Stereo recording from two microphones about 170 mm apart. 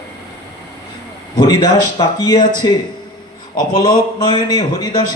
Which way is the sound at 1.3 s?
25° left (ahead or behind).